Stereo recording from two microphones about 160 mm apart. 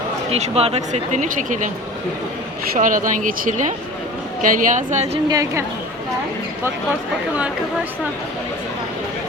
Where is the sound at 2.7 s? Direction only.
55° right (ahead or behind).